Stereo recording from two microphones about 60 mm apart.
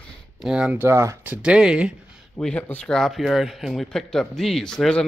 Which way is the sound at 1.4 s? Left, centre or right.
Centre.